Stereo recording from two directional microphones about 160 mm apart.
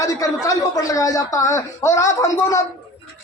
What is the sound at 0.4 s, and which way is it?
A man's voice, 20° left (ahead or behind).